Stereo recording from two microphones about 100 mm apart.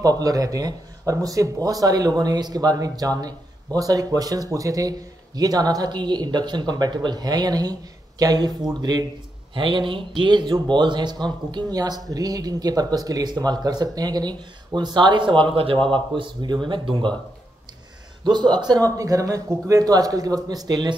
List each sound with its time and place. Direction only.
0.0 s speech: 35° right (ahead or behind)
9.5 s a man's voice: 55° right (ahead or behind)
18.2 s a man's voice: 45° right (ahead or behind)